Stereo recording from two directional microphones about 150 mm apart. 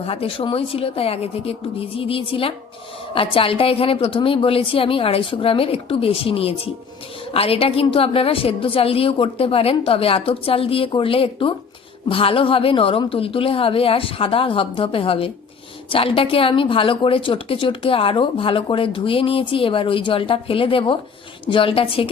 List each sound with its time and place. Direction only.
0.0 s speech: 40° left (ahead or behind)